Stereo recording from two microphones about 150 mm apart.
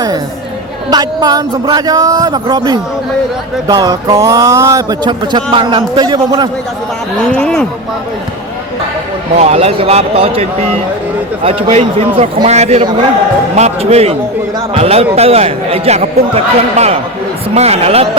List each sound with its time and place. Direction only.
0.9 s a sound: 25° right (ahead or behind)
7.3 s speech: 10° left (ahead or behind)
9.4 s speech: 45° right (ahead or behind)